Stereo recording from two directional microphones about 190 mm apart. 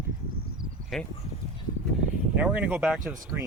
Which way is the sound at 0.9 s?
Centre (ahead or behind).